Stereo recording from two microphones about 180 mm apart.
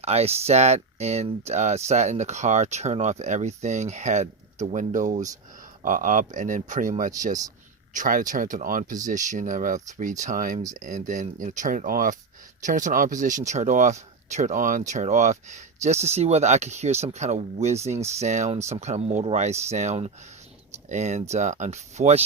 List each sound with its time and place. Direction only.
0.0 s speech: 35° right (ahead or behind)